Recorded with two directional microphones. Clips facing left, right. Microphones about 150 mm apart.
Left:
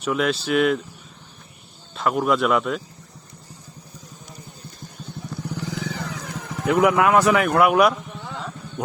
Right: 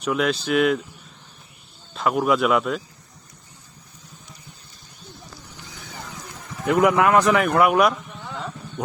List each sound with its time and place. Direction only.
0.0 s speech: centre (ahead or behind)
2.0 s speech: centre (ahead or behind)
5.5 s vehicle: 75° left (ahead or behind)
6.7 s speech: centre (ahead or behind)